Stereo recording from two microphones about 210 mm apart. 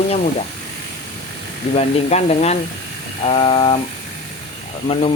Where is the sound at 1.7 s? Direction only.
30° left (ahead or behind).